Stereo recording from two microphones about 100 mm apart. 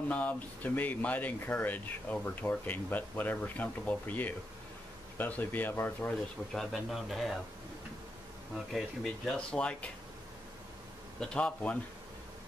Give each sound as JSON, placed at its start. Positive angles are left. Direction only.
{"t": 0.1, "sound": "speech", "side_deg": 15}
{"t": 6.5, "sound": "speech", "side_deg": 0}
{"t": 8.7, "sound": "speech", "side_deg": 5}
{"t": 11.1, "sound": "speech", "side_deg": 10}